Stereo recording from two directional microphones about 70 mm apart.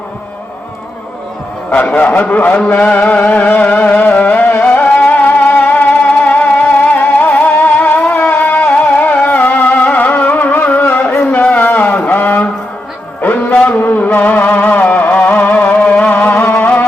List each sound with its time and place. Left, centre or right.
1.7 s a man's voice: centre
2.6 s music: centre
11.3 s a sound: left
13.2 s music: left